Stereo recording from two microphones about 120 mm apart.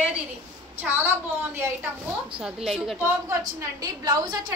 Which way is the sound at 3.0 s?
20° right (ahead or behind).